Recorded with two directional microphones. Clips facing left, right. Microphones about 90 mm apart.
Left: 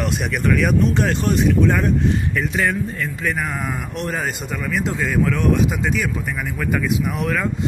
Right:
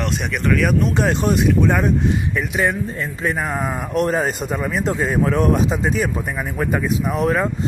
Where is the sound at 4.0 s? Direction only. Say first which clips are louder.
Right 8 dB; 35° right (ahead or behind).